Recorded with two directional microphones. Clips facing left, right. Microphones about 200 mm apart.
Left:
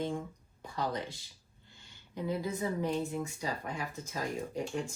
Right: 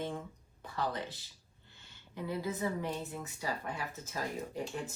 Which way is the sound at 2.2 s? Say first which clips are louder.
Left 2 dB; 20° left (ahead or behind).